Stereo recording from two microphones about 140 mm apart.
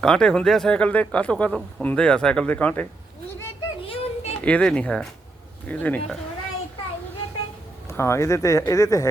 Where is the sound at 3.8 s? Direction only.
45° left (ahead or behind).